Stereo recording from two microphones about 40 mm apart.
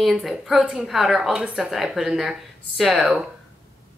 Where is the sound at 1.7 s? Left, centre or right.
Centre.